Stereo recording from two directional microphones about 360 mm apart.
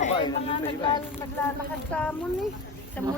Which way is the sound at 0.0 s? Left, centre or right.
Centre.